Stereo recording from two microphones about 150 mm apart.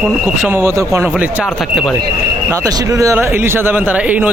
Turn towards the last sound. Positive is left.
turn(degrees=-10)  # may be behind; listen again after turning